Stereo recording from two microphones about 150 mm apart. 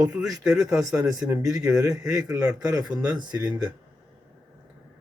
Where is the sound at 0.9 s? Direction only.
20° right (ahead or behind).